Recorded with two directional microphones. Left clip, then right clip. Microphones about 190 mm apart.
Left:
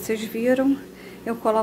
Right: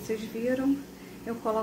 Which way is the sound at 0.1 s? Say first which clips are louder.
Left 8 dB; 40° left (ahead or behind).